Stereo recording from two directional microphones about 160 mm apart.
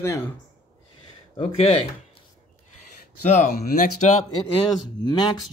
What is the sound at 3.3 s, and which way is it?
Speech, 55° left (ahead or behind).